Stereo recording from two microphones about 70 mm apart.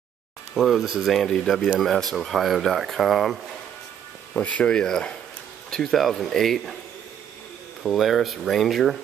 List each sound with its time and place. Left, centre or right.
0.6 s speech: centre
1.2 s speech: centre
4.3 s speech: left; by 6.8 s centre
7.8 s speech: centre